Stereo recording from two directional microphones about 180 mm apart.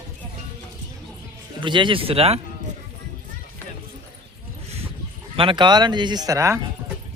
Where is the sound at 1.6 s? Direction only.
25° right (ahead or behind).